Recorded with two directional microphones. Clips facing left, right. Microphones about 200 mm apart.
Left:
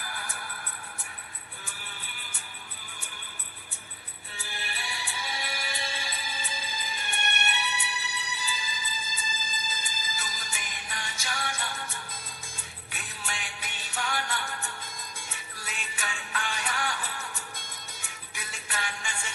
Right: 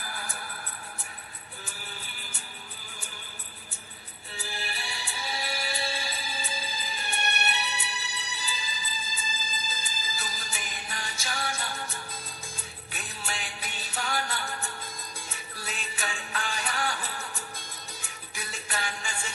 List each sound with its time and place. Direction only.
0.0 s music: 35° right (ahead or behind)
1.6 s music: 35° right (ahead or behind)
4.4 s music: 35° right (ahead or behind)